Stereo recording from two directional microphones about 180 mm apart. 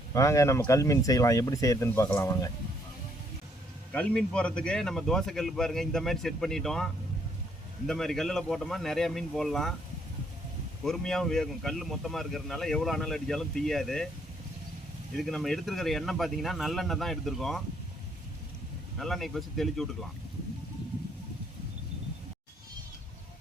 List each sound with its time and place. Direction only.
0.1 s speech: 15° left (ahead or behind)
3.9 s speech: 5° left (ahead or behind)
10.8 s speech: centre (ahead or behind)
15.1 s speech: centre (ahead or behind)
18.9 s speech: centre (ahead or behind)